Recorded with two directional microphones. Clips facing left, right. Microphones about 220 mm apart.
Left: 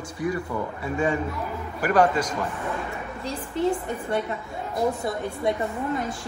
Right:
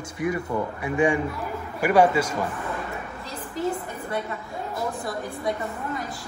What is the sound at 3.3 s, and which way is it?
Speech, 30° left (ahead or behind).